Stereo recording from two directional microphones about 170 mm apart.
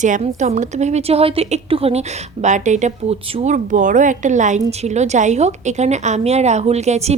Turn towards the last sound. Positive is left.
turn(degrees=-40)  # may be behind; listen again after turning